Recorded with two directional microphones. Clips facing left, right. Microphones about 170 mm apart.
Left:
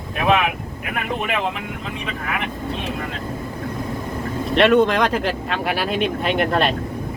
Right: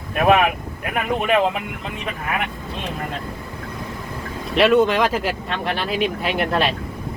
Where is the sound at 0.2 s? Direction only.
45° right (ahead or behind).